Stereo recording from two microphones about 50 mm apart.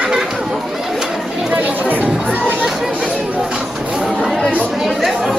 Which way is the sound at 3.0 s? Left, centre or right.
Centre.